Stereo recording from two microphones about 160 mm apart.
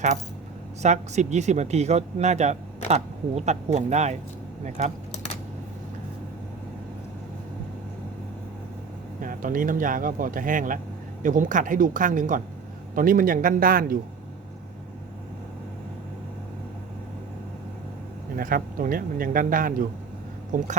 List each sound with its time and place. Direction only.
0.8 s speech: 45° right (ahead or behind)
9.2 s speech: 55° right (ahead or behind)
18.3 s speech: 60° right (ahead or behind)